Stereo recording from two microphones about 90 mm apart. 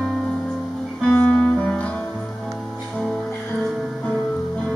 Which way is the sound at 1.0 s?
15° left (ahead or behind).